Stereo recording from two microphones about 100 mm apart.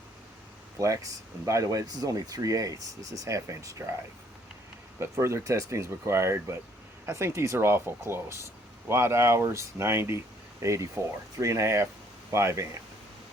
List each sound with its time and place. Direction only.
0.8 s speech: 35° right (ahead or behind)
4.9 s speech: 30° right (ahead or behind)